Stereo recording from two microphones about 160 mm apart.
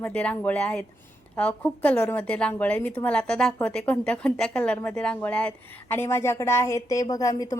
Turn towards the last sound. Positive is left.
turn(degrees=20)  # may be behind; listen again after turning